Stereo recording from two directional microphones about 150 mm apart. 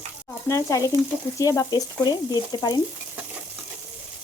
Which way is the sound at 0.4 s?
20° left (ahead or behind).